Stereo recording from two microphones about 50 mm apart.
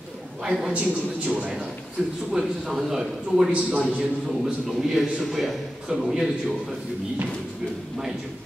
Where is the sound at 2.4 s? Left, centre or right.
Centre.